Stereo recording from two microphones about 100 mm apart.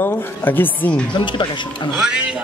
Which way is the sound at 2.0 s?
10° right (ahead or behind).